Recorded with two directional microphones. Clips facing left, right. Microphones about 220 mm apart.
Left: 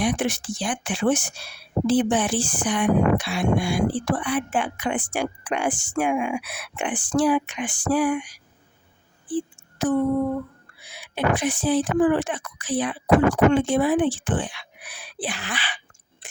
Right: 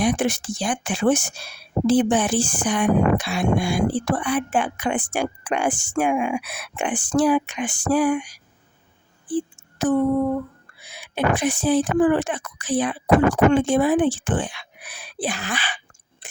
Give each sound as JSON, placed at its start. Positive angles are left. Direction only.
{"t": 0.0, "sound": "speech", "side_deg": -45}
{"t": 10.8, "sound": "speech", "side_deg": -45}
{"t": 16.2, "sound": "a sound", "side_deg": -45}